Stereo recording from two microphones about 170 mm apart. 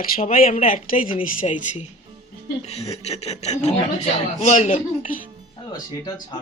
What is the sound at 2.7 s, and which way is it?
Speech, 40° left (ahead or behind).